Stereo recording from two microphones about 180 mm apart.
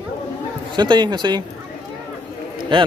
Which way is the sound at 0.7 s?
25° right (ahead or behind).